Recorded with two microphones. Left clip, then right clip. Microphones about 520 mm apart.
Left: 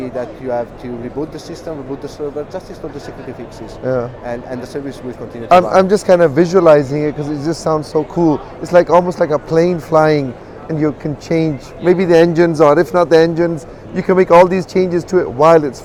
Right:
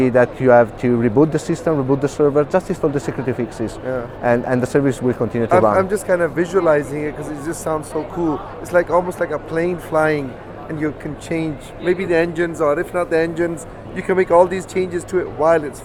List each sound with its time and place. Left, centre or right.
0.0 s speech: right
4.2 s speech: right
5.5 s a man's voice: left
13.9 s a man's voice: left